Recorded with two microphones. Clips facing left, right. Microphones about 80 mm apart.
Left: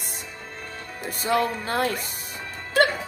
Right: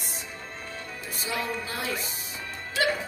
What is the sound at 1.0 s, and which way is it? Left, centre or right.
Speech, left.